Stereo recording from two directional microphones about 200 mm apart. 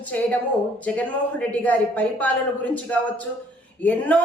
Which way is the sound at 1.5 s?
5° left (ahead or behind).